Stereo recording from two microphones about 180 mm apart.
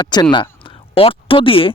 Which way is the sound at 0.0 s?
25° left (ahead or behind).